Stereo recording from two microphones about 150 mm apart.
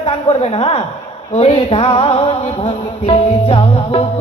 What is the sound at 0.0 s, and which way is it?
Speech, 40° left (ahead or behind).